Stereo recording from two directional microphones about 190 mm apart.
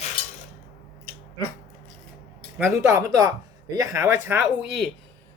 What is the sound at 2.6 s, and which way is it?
Speech, 15° right (ahead or behind).